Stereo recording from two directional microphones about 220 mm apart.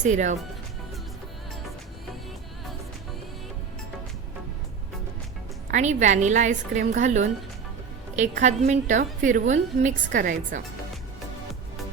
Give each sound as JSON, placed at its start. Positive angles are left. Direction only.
{"t": 0.0, "sound": "a woman's voice", "side_deg": -35}
{"t": 5.7, "sound": "a woman's voice", "side_deg": -35}
{"t": 8.4, "sound": "a woman's voice", "side_deg": -35}